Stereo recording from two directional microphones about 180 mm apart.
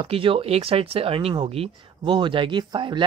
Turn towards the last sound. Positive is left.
turn(degrees=-25)  # may be behind; listen again after turning